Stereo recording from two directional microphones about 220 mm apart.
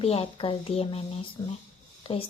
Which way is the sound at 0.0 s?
25° left (ahead or behind).